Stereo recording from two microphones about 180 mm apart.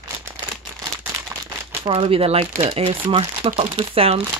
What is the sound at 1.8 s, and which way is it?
Speech, 30° right (ahead or behind).